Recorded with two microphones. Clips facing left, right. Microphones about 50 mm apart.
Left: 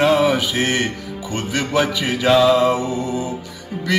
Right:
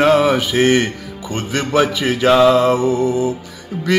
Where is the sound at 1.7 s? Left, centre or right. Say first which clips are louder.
Right 4 dB; right.